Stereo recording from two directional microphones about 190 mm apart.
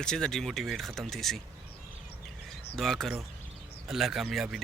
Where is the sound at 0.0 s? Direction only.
5° left (ahead or behind).